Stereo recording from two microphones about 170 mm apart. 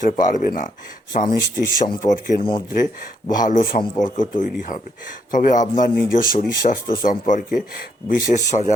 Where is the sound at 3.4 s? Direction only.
50° left (ahead or behind).